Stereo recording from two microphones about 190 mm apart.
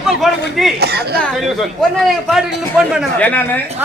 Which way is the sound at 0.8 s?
55° right (ahead or behind).